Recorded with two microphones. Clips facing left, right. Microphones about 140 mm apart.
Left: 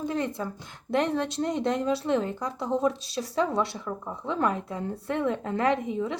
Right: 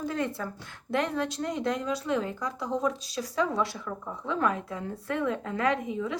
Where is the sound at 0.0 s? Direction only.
20° left (ahead or behind).